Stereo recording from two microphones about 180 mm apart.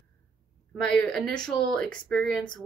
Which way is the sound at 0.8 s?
5° left (ahead or behind).